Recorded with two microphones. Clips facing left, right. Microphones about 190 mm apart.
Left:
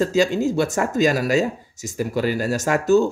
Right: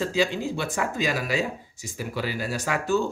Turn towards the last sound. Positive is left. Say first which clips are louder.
# left 8 dB
turn(degrees=40)  # may be behind; listen again after turning